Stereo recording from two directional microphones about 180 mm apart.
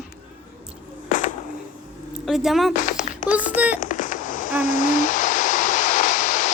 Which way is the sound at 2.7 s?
45° left (ahead or behind).